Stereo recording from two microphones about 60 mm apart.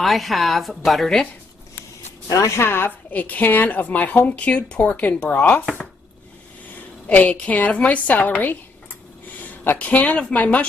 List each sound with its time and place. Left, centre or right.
0.0 s a woman's voice: centre
2.2 s a woman's voice: left
3.1 s speech: left
7.1 s speech: left